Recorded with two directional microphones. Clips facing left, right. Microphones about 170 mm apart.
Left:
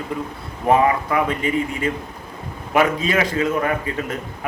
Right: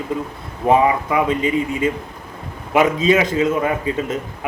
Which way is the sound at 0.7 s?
20° right (ahead or behind).